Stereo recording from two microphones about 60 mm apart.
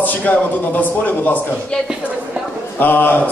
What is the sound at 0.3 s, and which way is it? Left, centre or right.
A man's voice, left.